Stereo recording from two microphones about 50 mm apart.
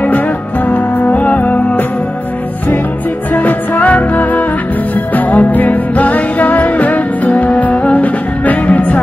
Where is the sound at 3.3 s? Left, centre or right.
Left.